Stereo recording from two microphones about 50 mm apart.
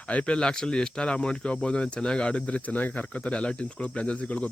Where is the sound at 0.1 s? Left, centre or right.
Left.